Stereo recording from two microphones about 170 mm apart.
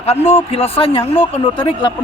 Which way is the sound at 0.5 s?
35° left (ahead or behind).